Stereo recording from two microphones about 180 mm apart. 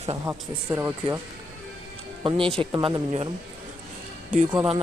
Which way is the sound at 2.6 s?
30° right (ahead or behind).